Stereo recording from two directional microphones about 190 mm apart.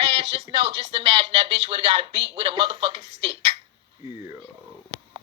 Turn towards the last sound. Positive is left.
turn(degrees=-30)  # may be behind; listen again after turning